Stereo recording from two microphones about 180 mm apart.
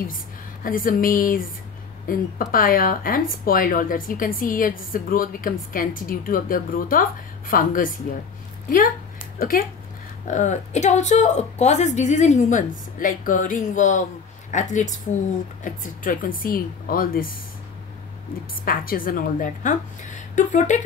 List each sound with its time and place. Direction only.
0.7 s a woman's voice: 50° left (ahead or behind)
10.2 s a woman's voice: 40° left (ahead or behind)
18.7 s a woman's voice: 50° left (ahead or behind)